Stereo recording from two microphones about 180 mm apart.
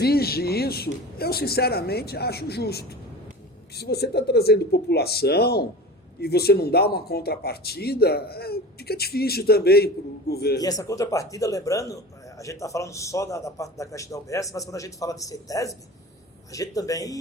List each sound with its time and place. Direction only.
0.0 s speech: 60° left (ahead or behind)
10.6 s a man's voice: 20° left (ahead or behind)